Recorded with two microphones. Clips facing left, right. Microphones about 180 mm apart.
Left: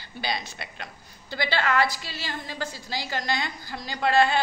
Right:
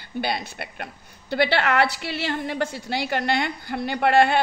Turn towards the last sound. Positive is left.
turn(degrees=-65)  # may be behind; listen again after turning